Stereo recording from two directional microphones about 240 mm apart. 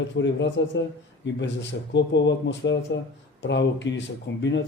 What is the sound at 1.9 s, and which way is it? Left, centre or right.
Speech, left.